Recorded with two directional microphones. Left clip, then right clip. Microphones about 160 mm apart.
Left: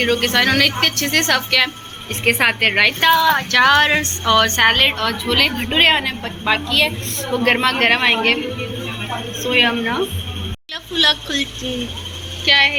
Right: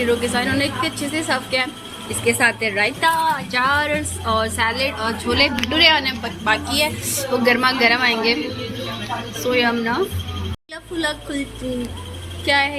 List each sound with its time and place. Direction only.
0.0 s a woman's voice: 5° right (ahead or behind)
9.4 s a woman's voice: 10° right (ahead or behind)
12.5 s speech: 20° right (ahead or behind)